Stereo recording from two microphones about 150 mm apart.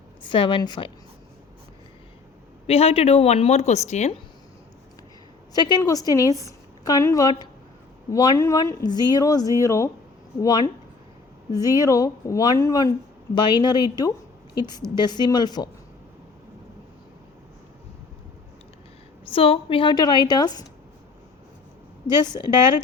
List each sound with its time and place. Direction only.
0.2 s a woman's voice: 35° left (ahead or behind)
2.6 s a woman's voice: 40° left (ahead or behind)
5.5 s a woman's voice: 30° left (ahead or behind)
11.8 s a woman's voice: 25° left (ahead or behind)
19.3 s a woman's voice: 40° left (ahead or behind)
22.0 s a woman's voice: 30° left (ahead or behind)